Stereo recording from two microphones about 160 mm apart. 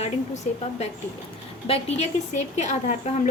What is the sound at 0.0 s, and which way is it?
A woman's voice, 40° left (ahead or behind).